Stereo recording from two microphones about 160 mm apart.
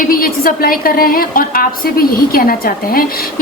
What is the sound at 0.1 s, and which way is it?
A woman's voice, 65° left (ahead or behind).